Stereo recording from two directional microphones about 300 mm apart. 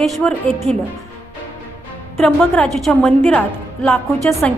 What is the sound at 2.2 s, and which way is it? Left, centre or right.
A woman's voice, centre.